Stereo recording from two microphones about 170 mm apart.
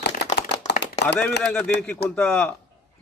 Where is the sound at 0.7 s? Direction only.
80° left.